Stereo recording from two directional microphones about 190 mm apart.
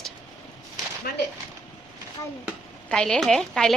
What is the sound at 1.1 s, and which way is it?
Speech, 55° left (ahead or behind).